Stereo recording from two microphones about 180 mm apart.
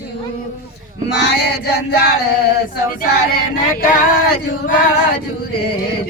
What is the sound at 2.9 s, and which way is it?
Speech, 60° left (ahead or behind).